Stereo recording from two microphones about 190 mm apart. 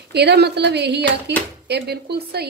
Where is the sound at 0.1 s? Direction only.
60° right (ahead or behind).